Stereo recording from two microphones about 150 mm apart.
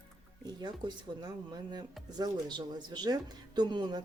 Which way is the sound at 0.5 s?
30° right (ahead or behind).